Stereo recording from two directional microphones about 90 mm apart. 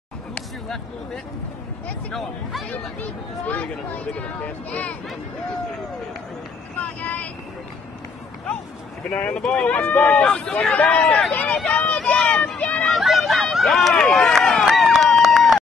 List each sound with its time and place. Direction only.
0.3 s a sound: 5° left (ahead or behind)
2.0 s speech: 5° left (ahead or behind)
3.0 s speech: 15° left (ahead or behind)
6.8 s vehicle: 20° left (ahead or behind)
9.1 s speech: 15° left (ahead or behind)
12.0 s a sound: 10° left (ahead or behind)
12.8 s run: centre (ahead or behind)